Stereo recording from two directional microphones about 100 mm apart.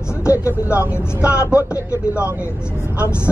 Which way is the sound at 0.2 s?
30° left (ahead or behind).